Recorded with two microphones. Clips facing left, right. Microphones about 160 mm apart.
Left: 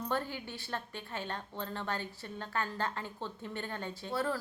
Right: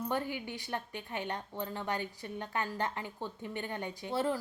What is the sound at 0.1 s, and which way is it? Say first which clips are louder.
A woman's voice: right 1 dB; 15° right (ahead or behind).